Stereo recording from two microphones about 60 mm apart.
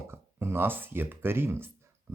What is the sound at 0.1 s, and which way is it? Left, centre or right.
Speech, right.